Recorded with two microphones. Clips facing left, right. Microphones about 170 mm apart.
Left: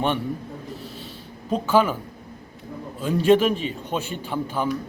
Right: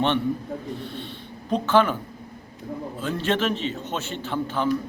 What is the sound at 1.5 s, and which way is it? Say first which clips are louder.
Speech: even; 5° left (ahead or behind).